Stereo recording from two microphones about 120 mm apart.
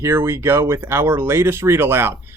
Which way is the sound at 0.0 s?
25° right (ahead or behind).